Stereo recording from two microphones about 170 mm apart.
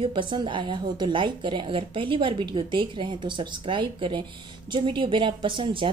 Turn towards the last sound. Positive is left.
turn(degrees=-30)  # may be behind; listen again after turning